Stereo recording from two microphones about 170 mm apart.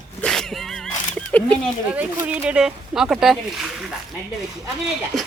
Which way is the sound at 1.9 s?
10° right (ahead or behind).